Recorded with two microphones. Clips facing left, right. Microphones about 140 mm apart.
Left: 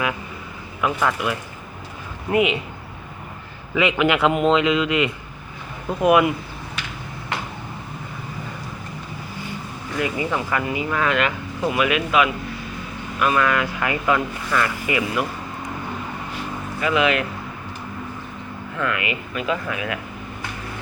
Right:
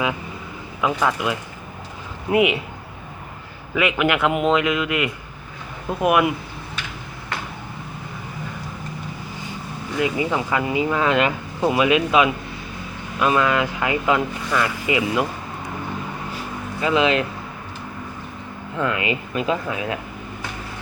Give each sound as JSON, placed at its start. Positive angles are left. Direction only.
{"t": 0.8, "sound": "a man's voice", "side_deg": -15}
{"t": 3.8, "sound": "a man's voice", "side_deg": -5}
{"t": 10.0, "sound": "speech", "side_deg": -20}
{"t": 16.8, "sound": "speech", "side_deg": -25}
{"t": 18.8, "sound": "speech", "side_deg": -25}